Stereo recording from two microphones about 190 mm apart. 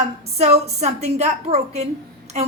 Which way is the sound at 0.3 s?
35° right (ahead or behind).